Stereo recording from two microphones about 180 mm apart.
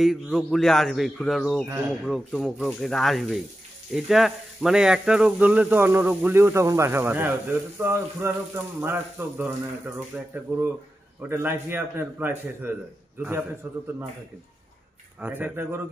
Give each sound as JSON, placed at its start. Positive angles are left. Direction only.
{"t": 0.0, "sound": "speech", "side_deg": 0}
{"t": 15.1, "sound": "speech", "side_deg": -10}